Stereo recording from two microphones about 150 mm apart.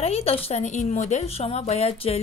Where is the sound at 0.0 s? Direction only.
40° left (ahead or behind).